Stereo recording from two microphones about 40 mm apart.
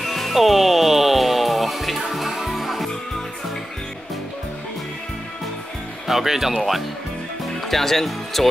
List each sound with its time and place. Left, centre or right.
0.0 s music: centre
6.0 s speech: centre
7.6 s speech: centre